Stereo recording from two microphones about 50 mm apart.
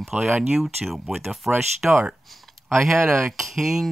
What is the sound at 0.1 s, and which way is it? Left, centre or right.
Speech, right.